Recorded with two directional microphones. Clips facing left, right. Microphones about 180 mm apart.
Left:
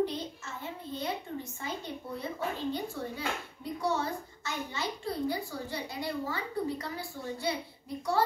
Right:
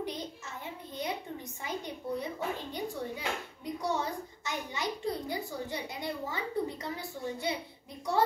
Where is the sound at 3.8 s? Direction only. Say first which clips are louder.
Left 2 dB; 15° right (ahead or behind).